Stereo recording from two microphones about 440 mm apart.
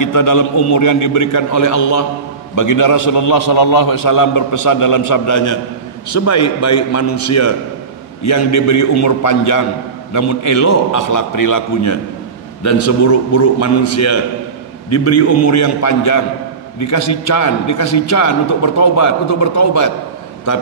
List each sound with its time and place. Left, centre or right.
0.0 s a man's voice: left